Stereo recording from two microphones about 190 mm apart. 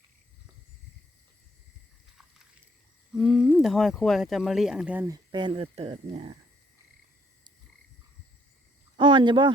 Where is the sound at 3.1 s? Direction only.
Centre (ahead or behind); by 6.4 s 30° right (ahead or behind).